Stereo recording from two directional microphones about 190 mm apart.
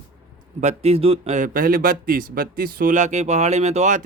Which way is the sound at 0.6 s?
35° right (ahead or behind).